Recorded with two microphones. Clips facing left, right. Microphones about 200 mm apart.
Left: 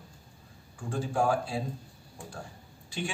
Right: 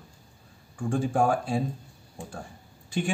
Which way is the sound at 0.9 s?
50° right (ahead or behind).